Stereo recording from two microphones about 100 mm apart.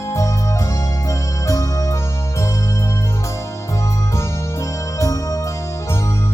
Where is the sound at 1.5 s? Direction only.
35° left (ahead or behind).